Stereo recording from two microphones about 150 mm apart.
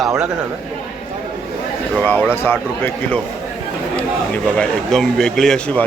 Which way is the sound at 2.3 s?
15° left (ahead or behind).